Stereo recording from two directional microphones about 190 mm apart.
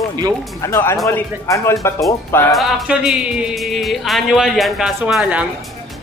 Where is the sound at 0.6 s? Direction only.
15° left (ahead or behind).